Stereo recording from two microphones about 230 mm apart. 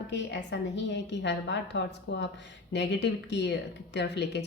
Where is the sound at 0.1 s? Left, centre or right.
Left.